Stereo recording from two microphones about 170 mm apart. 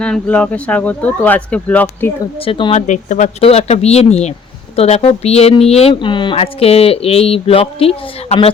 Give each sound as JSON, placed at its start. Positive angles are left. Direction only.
{"t": 0.0, "sound": "speech", "side_deg": 5}
{"t": 2.4, "sound": "speech", "side_deg": 30}
{"t": 2.8, "sound": "speech", "side_deg": 45}